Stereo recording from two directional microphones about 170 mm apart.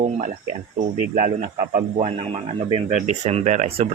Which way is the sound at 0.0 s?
40° right (ahead or behind).